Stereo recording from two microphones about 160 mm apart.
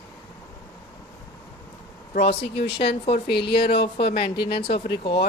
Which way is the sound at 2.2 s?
90° left.